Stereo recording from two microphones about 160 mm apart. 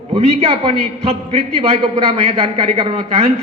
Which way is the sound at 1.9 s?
40° right (ahead or behind).